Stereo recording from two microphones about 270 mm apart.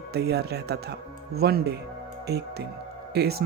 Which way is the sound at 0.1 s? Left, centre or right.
Right.